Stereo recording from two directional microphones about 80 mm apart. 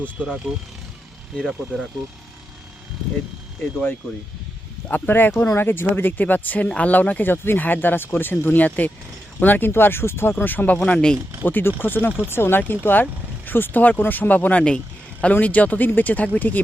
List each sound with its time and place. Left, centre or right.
0.5 s speech: right
1.4 s speech: centre
4.9 s speech: left
10.8 s speech: centre
11.4 s speech: left